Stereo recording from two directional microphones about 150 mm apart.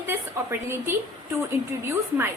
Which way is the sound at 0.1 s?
15° right (ahead or behind).